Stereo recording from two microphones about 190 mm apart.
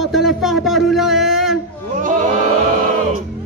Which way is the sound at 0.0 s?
Centre (ahead or behind).